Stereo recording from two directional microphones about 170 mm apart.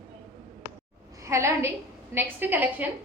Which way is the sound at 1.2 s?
15° right (ahead or behind).